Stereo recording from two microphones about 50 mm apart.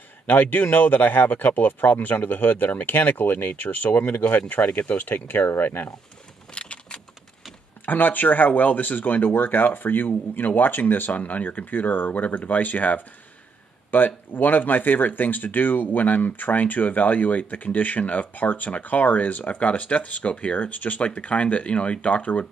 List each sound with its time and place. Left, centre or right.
0.3 s speech: left
6.5 s keys jangling: centre
7.8 s speech: left